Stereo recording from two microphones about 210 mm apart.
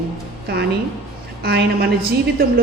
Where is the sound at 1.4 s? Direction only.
50° right (ahead or behind).